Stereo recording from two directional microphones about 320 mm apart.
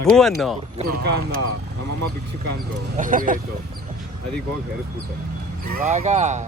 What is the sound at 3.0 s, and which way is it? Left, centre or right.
Speech, right.